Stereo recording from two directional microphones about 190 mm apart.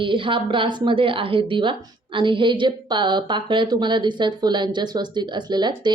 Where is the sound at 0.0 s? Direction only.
25° right (ahead or behind).